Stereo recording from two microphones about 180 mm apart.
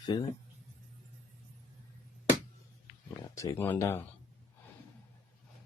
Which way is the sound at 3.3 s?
15° left (ahead or behind).